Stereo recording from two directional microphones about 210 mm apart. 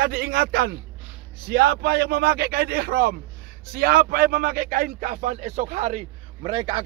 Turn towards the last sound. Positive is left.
turn(degrees=-25)  # may be behind; listen again after turning